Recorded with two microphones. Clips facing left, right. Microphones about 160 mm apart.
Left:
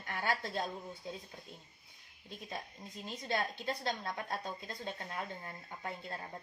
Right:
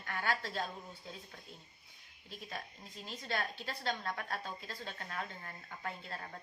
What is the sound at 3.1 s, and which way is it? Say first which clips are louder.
A woman's voice: left 3 dB; 20° left (ahead or behind).